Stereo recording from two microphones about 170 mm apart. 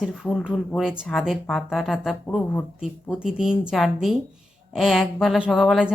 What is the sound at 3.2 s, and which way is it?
Speech, 5° right (ahead or behind).